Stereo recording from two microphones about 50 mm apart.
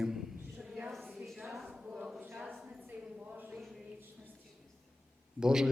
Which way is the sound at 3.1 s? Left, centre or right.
Right.